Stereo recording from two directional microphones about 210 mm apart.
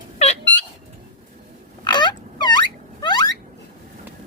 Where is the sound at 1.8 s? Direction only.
20° left (ahead or behind).